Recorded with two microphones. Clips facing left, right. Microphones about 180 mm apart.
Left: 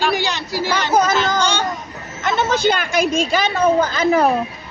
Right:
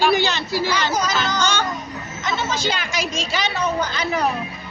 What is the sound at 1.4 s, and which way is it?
Speech, 30° left (ahead or behind).